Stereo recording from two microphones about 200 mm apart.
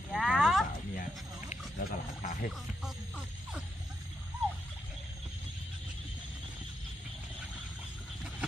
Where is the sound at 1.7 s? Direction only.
40° left (ahead or behind).